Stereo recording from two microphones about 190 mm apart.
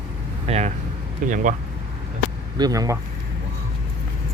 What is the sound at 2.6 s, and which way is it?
Speech, 20° right (ahead or behind).